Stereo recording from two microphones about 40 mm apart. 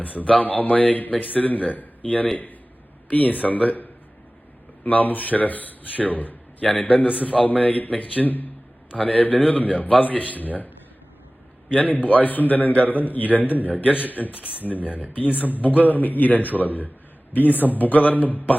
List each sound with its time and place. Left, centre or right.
0.0 s a man's voice: left
4.9 s a man's voice: left
9.0 s a man's voice: left
11.7 s a man's voice: left